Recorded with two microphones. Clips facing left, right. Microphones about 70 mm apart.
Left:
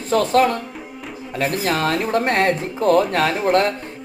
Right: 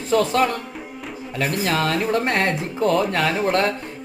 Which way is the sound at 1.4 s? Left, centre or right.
Left.